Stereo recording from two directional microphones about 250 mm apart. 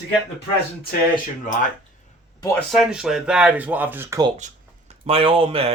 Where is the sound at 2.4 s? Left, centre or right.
Centre.